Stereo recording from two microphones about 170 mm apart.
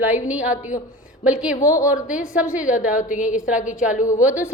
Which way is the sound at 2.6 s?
50° left (ahead or behind).